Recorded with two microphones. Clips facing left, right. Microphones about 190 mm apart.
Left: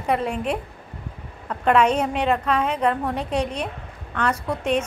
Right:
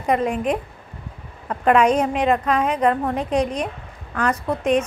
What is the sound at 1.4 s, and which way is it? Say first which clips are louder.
A woman's voice: right 2 dB; 10° right (ahead or behind).